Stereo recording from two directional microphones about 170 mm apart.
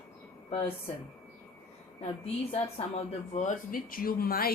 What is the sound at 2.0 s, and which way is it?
Speech, 35° left (ahead or behind).